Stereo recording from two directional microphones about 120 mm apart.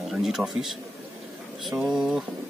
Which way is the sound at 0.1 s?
Centre (ahead or behind).